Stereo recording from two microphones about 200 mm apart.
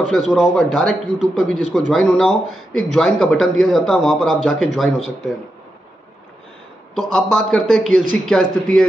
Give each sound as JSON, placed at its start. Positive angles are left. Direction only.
{"t": 0.1, "sound": "speech", "side_deg": 0}
{"t": 7.0, "sound": "speech", "side_deg": 0}